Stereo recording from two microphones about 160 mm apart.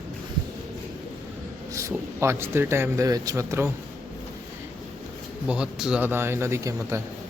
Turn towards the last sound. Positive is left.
turn(degrees=-20)  # may be behind; listen again after turning